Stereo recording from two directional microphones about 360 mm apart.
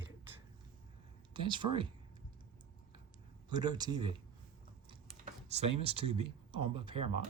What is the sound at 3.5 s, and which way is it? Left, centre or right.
Speech, centre.